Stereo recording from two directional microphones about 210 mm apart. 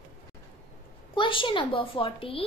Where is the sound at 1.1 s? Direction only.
25° left (ahead or behind).